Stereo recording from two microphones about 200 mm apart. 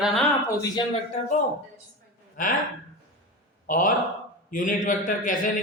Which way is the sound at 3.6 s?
45° left (ahead or behind).